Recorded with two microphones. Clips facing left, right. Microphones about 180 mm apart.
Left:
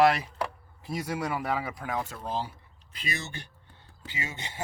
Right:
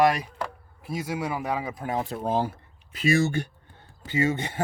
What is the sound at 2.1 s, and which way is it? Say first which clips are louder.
Speech: right 8 dB; 45° right (ahead or behind).